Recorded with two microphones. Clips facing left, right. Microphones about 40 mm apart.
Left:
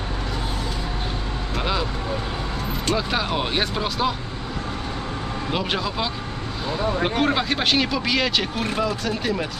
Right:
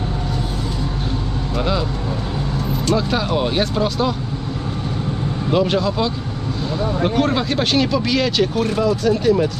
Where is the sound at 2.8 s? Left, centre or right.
Centre.